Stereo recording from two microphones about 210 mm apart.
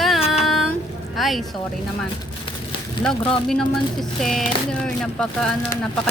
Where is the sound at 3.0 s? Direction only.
5° left (ahead or behind).